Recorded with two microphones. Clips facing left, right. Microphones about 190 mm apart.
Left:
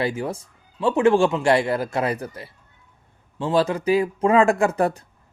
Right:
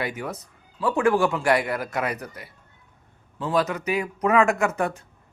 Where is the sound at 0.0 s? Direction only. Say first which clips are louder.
Left 5 dB; 30° left (ahead or behind).